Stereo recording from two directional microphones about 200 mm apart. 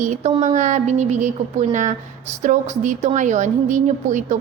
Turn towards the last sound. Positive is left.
turn(degrees=-40)  # may be behind; listen again after turning